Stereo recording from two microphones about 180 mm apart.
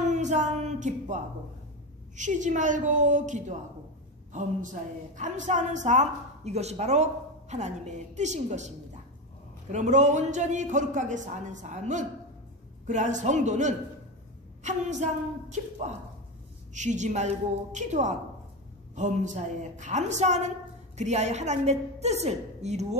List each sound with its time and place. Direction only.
0.1 s a sound: 40° right (ahead or behind)
2.1 s a man's voice: 45° right (ahead or behind)
16.7 s a woman's voice: 40° right (ahead or behind)